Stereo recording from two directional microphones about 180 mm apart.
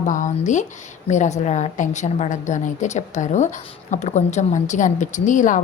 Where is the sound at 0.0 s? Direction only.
45° left (ahead or behind).